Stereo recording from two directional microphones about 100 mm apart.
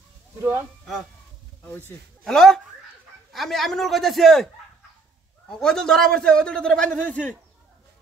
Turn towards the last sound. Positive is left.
turn(degrees=15)  # may be behind; listen again after turning